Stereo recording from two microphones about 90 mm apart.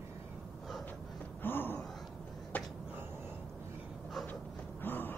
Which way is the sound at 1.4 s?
20° left (ahead or behind).